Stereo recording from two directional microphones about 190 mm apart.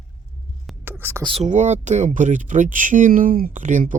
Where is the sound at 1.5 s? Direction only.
40° right (ahead or behind).